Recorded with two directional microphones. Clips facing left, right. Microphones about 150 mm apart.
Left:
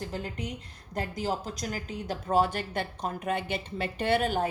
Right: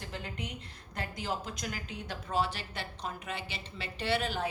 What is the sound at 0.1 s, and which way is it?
A woman's voice, 40° left (ahead or behind).